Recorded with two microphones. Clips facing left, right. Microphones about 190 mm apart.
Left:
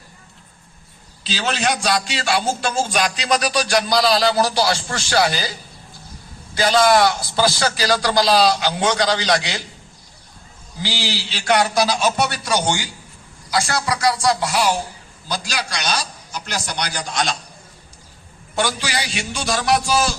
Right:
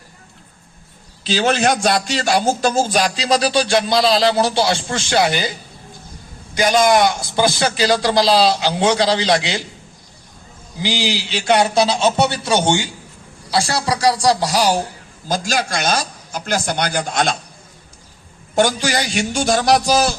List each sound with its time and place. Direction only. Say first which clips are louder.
1.2 s a man's voice: right 6 dB; 50° right (ahead or behind); by 9.6 s 25° right (ahead or behind)
10.8 s a man's voice: right 5 dB; 15° right (ahead or behind); by 14.8 s 35° right (ahead or behind)
15.3 s speech: right 6 dB; 45° right (ahead or behind)
18.5 s speech: right 6 dB; 45° right (ahead or behind)